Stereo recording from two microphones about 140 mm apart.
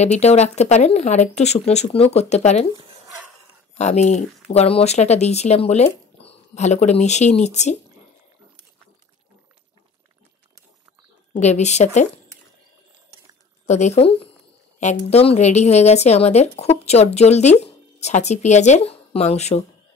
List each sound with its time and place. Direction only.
0.0 s speech: 50° left (ahead or behind)
3.7 s speech: 55° left (ahead or behind)
11.3 s speech: 55° left (ahead or behind)
13.7 s speech: 55° left (ahead or behind)